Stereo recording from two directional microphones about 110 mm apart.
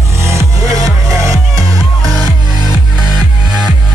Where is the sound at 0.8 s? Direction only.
30° right (ahead or behind).